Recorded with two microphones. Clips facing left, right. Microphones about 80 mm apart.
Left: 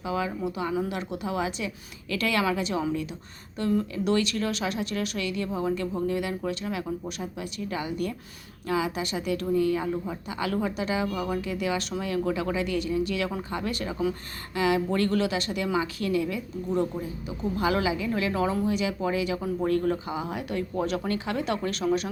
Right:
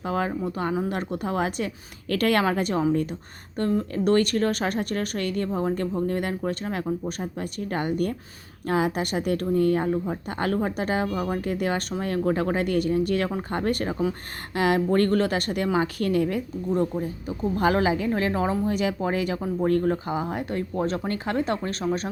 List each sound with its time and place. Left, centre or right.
0.0 s a woman's voice: right